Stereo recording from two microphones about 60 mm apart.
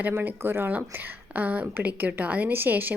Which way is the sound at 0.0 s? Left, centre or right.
Right.